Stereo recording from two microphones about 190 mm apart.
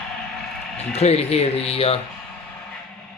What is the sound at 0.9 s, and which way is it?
Speech, 35° left (ahead or behind).